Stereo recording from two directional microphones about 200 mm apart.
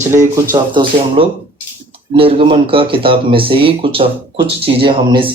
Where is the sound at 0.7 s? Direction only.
25° right (ahead or behind).